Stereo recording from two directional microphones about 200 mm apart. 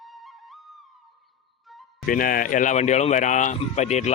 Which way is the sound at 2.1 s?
45° left (ahead or behind).